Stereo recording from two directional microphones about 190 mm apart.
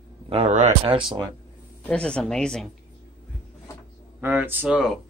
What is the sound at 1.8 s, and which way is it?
Speech, 5° left (ahead or behind).